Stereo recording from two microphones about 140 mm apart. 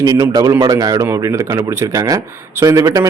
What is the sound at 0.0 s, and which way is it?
Speech, 25° right (ahead or behind).